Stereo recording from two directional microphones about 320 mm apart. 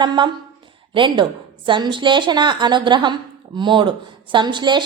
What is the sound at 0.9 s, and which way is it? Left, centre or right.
A woman's voice, centre.